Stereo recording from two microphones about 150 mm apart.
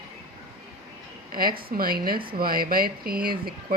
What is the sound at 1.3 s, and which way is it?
A woman's voice, 75° right (ahead or behind).